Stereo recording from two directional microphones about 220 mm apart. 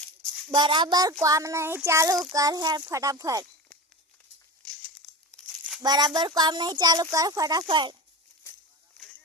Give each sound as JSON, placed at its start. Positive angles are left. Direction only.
{"t": 0.5, "sound": "a child's voice", "side_deg": -20}
{"t": 4.6, "sound": "crumpling", "side_deg": 0}
{"t": 5.8, "sound": "speech", "side_deg": -20}